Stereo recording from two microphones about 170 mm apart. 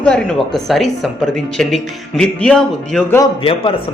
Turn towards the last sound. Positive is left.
turn(degrees=30)  # may be behind; listen again after turning